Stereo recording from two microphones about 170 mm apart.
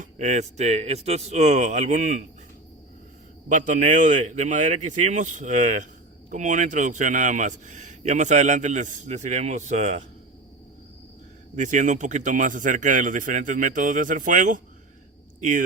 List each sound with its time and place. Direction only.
0.0 s a man's voice: 45° right (ahead or behind)
3.5 s a man's voice: 45° right (ahead or behind)
11.5 s a man's voice: 45° right (ahead or behind)